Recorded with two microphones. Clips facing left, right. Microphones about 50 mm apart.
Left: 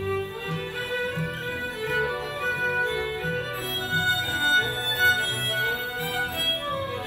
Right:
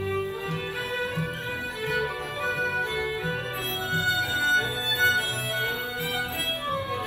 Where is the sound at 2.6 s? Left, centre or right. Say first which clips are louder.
Left 3 dB; left.